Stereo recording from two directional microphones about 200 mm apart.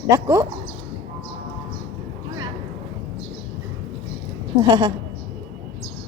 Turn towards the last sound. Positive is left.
turn(degrees=-20)  # may be behind; listen again after turning